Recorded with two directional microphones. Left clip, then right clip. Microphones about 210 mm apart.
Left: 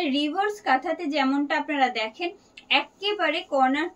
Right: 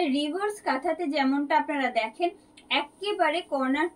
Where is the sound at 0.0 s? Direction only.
15° left (ahead or behind).